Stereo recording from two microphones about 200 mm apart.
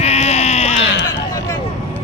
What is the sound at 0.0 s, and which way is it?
Sheep, 35° left (ahead or behind).